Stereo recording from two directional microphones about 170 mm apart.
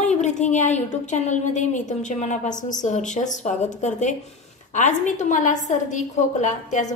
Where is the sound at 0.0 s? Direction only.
45° left (ahead or behind).